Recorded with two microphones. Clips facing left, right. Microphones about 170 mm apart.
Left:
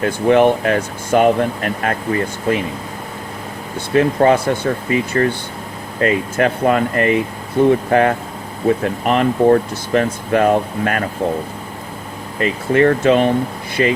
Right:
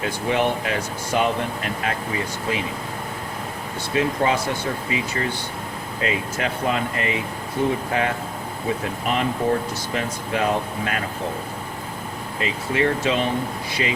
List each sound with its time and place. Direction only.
0.0 s speech: 50° left (ahead or behind)
3.8 s speech: 55° left (ahead or behind)
12.4 s speech: 50° left (ahead or behind)